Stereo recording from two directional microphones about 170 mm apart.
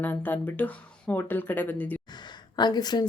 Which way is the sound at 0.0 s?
10° left (ahead or behind).